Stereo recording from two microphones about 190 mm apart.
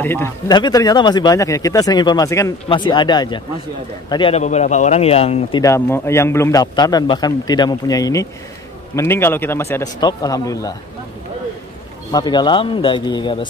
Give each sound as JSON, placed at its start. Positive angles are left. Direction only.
{"t": 0.0, "sound": "a man's voice", "side_deg": 15}
{"t": 5.6, "sound": "a man's voice", "side_deg": 15}
{"t": 12.1, "sound": "speech", "side_deg": 20}